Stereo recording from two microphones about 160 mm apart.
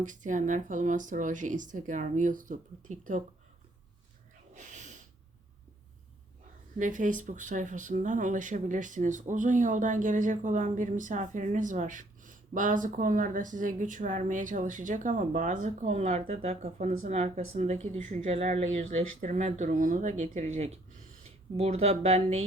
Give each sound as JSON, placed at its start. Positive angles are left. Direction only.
{"t": 0.0, "sound": "speech", "side_deg": -50}
{"t": 4.5, "sound": "snort", "side_deg": -50}
{"t": 6.7, "sound": "speech", "side_deg": -50}